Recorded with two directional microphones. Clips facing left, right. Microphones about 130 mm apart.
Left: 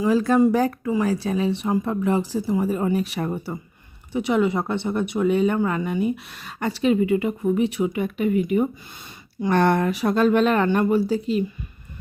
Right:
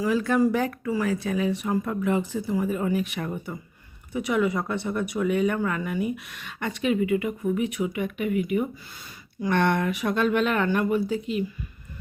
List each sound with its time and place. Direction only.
0.0 s speech: 30° left (ahead or behind)